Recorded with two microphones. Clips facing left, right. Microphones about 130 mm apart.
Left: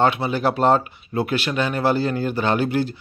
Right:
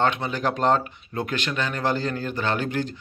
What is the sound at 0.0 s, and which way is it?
Speech, 10° left (ahead or behind).